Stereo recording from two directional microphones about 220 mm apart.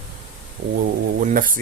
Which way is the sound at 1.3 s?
40° right (ahead or behind).